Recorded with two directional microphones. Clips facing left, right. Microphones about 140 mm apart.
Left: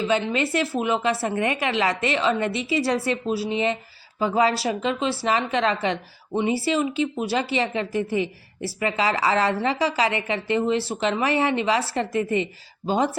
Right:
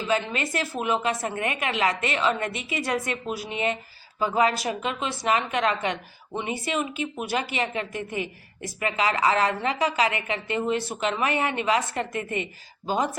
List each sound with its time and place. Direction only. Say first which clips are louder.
0.0 s a woman's voice: left 4 dB; 25° left (ahead or behind)